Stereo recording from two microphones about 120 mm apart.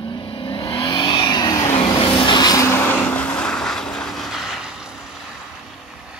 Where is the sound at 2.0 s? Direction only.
40° left (ahead or behind); by 5.0 s 5° right (ahead or behind).